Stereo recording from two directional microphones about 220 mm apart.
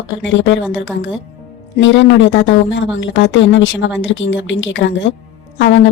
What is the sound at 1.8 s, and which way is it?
A woman's voice, 55° left (ahead or behind).